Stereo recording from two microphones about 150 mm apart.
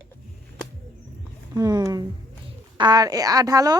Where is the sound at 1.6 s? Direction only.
25° right (ahead or behind).